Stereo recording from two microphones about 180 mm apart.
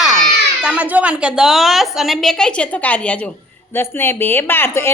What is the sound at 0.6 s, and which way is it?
A woman's voice, 5° right (ahead or behind).